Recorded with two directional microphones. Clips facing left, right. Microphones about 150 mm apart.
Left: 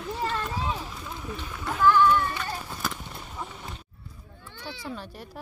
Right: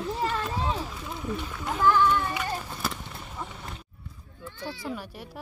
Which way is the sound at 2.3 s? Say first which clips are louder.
Right 2 dB; 10° right (ahead or behind).